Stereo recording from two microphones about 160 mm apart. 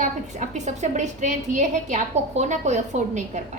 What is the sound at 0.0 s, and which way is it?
A woman's voice, 45° right (ahead or behind).